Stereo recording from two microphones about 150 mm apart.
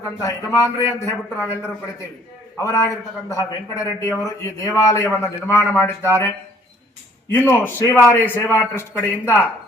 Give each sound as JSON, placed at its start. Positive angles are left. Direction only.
{"t": 0.2, "sound": "a man's voice", "side_deg": 20}
{"t": 2.7, "sound": "a man's voice", "side_deg": 20}
{"t": 7.5, "sound": "a man's voice", "side_deg": 15}